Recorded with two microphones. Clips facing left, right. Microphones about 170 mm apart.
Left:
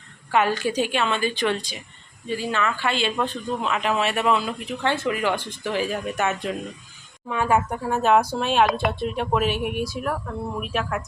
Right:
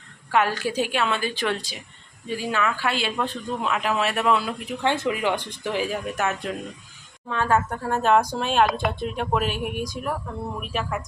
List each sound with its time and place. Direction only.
0.3 s speech: centre (ahead or behind)
4.8 s speech: 15° right (ahead or behind)
7.3 s speech: 15° left (ahead or behind)